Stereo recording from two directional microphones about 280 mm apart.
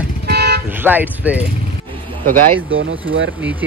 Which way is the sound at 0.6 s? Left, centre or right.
Centre.